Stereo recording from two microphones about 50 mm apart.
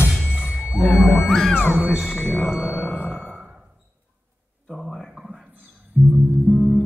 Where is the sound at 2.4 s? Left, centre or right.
Centre.